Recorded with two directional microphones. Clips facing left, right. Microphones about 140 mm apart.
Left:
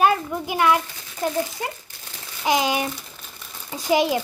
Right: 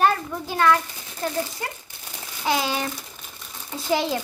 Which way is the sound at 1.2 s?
20° left (ahead or behind).